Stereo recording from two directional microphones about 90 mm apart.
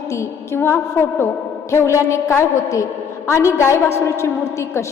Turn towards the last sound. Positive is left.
turn(degrees=30)  # may be behind; listen again after turning